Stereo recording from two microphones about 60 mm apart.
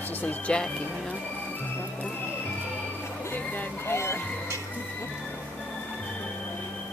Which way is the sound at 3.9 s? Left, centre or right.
Left.